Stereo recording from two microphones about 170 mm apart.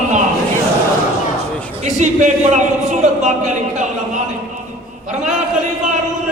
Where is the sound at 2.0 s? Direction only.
45° right (ahead or behind).